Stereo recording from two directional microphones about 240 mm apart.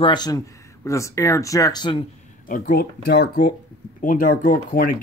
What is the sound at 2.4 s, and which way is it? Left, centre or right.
Speech, left.